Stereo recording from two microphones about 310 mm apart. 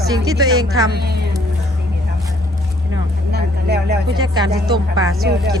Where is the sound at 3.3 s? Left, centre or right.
Right.